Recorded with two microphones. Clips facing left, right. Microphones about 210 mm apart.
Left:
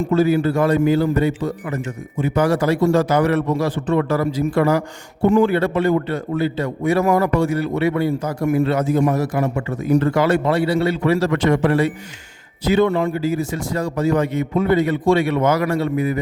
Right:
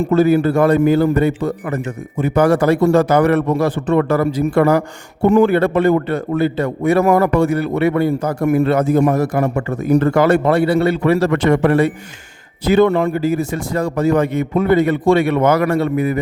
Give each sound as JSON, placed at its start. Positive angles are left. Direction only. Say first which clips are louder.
{"t": 0.0, "sound": "a man's voice", "louder": "right 3 dB", "side_deg": -60}